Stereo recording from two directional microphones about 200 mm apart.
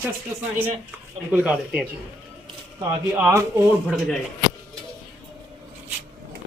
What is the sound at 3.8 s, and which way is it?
Speech, centre (ahead or behind).